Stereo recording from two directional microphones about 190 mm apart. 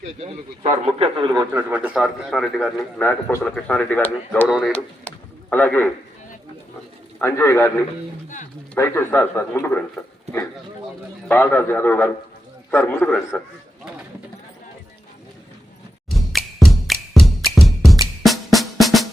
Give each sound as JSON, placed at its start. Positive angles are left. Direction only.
{"t": 0.9, "sound": "a man's voice", "side_deg": -30}
{"t": 1.7, "sound": "a man's voice", "side_deg": -5}
{"t": 4.4, "sound": "a man's voice", "side_deg": 0}
{"t": 7.2, "sound": "a man's voice", "side_deg": 15}
{"t": 8.7, "sound": "a man's voice", "side_deg": 10}
{"t": 11.3, "sound": "a man's voice", "side_deg": 10}
{"t": 16.0, "sound": "music", "side_deg": 0}
{"t": 18.2, "sound": "drum", "side_deg": 0}